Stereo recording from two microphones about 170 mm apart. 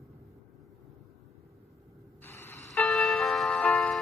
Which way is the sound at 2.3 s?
15° left (ahead or behind).